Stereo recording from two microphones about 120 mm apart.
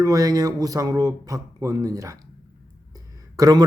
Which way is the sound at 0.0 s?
30° right (ahead or behind).